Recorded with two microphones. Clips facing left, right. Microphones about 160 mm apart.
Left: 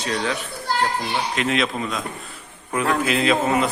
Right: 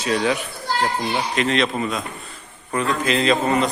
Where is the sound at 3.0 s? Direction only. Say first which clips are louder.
Right 3 dB; 5° left (ahead or behind).